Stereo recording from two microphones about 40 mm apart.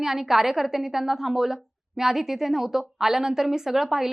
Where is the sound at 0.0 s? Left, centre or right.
Centre.